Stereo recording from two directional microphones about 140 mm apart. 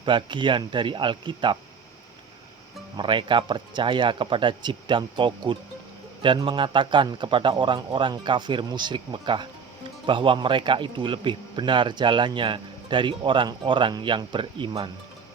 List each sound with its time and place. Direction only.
0.0 s speech: 35° right (ahead or behind)
3.0 s speech: 35° right (ahead or behind)